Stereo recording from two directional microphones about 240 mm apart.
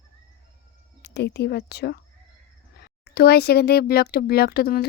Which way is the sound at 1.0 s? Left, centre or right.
Left.